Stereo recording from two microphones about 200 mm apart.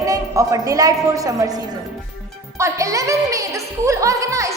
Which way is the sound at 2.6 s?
15° right (ahead or behind).